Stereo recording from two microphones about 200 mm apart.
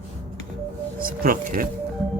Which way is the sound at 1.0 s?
45° right (ahead or behind).